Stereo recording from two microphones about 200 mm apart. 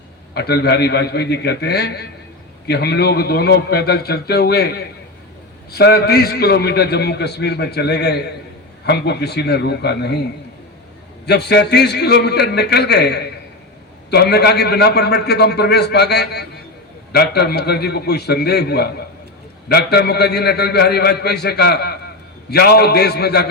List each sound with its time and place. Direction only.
0.3 s a man's voice: 55° left (ahead or behind)
11.3 s a man's voice: 55° left (ahead or behind)